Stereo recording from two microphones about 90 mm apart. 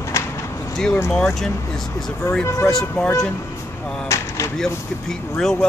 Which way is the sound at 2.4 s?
35° left (ahead or behind).